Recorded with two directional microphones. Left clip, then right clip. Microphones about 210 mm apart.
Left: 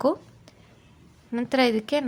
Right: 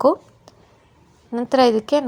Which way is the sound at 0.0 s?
5° right (ahead or behind).